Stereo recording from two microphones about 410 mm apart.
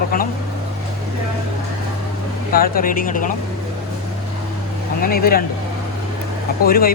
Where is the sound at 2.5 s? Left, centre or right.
Left.